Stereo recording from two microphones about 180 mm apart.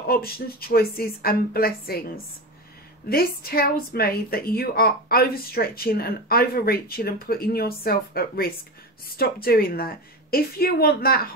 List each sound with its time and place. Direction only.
0.0 s a woman's voice: 55° left (ahead or behind)
3.1 s a woman's voice: 55° left (ahead or behind)